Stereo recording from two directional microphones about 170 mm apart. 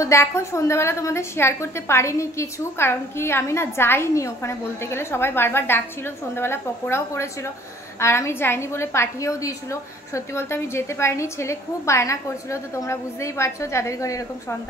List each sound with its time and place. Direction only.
0.0 s a woman's voice: 15° left (ahead or behind)